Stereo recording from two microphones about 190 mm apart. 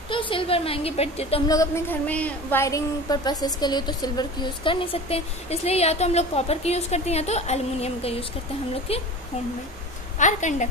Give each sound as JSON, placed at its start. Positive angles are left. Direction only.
{"t": 0.1, "sound": "a woman's voice", "side_deg": 25}
{"t": 1.5, "sound": "a woman's voice", "side_deg": 15}
{"t": 10.1, "sound": "a woman's voice", "side_deg": 40}